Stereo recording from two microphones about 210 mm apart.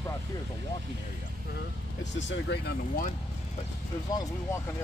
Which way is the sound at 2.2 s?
55° left (ahead or behind).